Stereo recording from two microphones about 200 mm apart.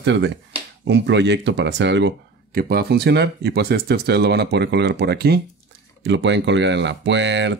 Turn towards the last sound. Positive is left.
turn(degrees=-60)  # may be behind; listen again after turning